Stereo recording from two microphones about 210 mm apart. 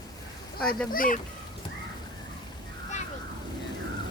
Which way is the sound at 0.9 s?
40° left (ahead or behind).